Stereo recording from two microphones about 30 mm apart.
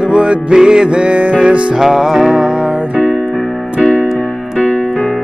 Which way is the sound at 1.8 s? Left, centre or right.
Centre.